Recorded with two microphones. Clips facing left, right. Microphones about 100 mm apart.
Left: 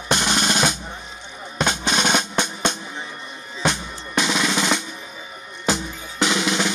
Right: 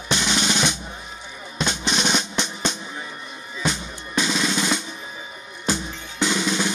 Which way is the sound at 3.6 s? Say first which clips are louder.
Left 3 dB; 65° left (ahead or behind).